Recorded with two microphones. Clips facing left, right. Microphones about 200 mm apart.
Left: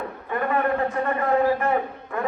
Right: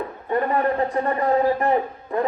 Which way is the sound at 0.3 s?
35° right (ahead or behind).